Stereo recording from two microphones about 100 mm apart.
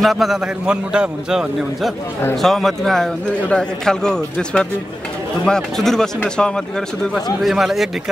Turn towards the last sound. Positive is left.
turn(degrees=0)  # may be behind; listen again after turning